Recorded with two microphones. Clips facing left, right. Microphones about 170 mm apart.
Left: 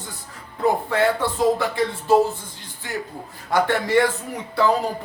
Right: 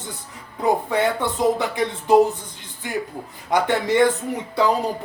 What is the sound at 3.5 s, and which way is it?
Speech, 20° right (ahead or behind).